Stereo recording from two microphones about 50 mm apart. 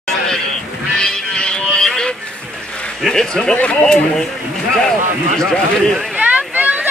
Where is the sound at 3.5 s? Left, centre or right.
Left.